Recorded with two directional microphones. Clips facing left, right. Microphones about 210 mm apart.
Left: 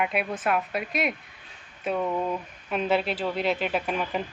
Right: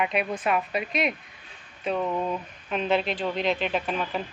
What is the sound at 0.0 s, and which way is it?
Speech, 5° left (ahead or behind).